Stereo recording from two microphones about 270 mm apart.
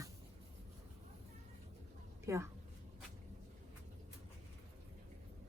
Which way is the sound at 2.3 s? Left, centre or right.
Centre.